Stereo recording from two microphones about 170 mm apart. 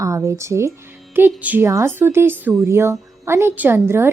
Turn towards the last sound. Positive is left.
turn(degrees=-15)  # may be behind; listen again after turning